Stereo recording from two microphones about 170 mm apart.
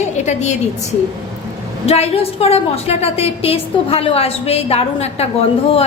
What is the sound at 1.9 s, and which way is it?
A woman's voice, 35° left (ahead or behind).